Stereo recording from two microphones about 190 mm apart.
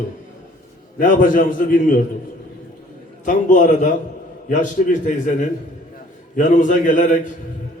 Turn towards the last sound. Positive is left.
turn(degrees=40)  # may be behind; listen again after turning